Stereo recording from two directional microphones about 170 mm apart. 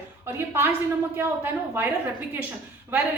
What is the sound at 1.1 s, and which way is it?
Speech, 15° right (ahead or behind).